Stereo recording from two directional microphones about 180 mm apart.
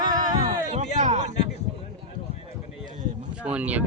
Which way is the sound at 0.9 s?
40° right (ahead or behind).